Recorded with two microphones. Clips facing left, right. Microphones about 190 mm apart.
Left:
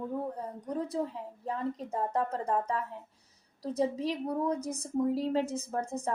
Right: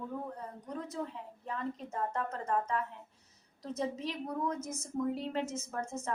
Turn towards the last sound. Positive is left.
turn(degrees=35)  # may be behind; listen again after turning